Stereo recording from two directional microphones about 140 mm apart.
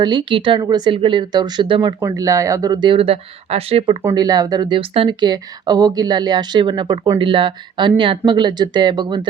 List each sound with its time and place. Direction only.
0.0 s speech: 30° right (ahead or behind)
4.1 s speech: 30° right (ahead or behind)